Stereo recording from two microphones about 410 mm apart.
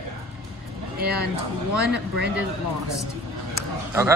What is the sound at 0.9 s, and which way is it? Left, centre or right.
Speech, right.